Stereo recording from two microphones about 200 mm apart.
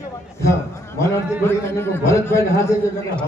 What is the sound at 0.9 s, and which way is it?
A man's voice, 15° left (ahead or behind).